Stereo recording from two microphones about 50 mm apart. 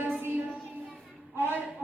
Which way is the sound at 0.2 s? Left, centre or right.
Right.